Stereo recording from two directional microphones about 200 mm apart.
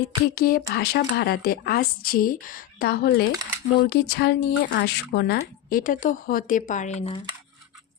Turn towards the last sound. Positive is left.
turn(degrees=35)  # may be behind; listen again after turning